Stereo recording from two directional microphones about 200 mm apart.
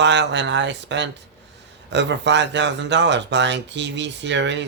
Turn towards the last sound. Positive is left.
turn(degrees=-60)  # may be behind; listen again after turning